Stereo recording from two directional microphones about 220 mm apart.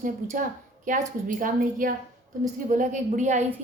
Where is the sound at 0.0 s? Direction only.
35° right (ahead or behind).